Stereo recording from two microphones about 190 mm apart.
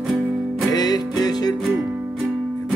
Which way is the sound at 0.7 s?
20° left (ahead or behind).